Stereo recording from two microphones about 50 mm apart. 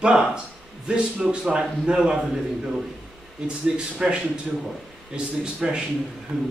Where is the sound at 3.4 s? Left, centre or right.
Centre.